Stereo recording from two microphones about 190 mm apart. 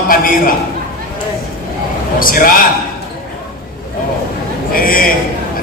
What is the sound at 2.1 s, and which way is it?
Speech, 45° left (ahead or behind).